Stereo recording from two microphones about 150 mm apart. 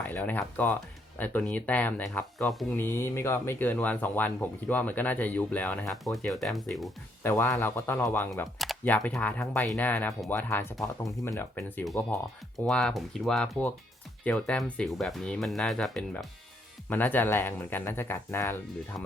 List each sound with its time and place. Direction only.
0.0 s speech: 10° left (ahead or behind)
2.7 s speech: 15° left (ahead or behind); by 6.9 s centre (ahead or behind)
7.2 s speech: 15° left (ahead or behind)
8.5 s speech: centre (ahead or behind)
8.8 s speech: 10° left (ahead or behind)
12.5 s speech: centre (ahead or behind)